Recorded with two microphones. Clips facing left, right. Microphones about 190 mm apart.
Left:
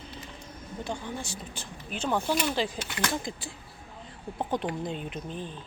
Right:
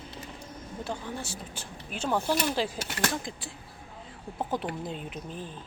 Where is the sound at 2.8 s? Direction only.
40° right (ahead or behind).